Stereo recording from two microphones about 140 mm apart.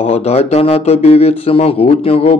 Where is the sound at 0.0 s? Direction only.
50° left (ahead or behind).